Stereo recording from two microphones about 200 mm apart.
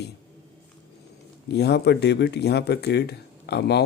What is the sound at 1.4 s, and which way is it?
Speech, 55° left (ahead or behind).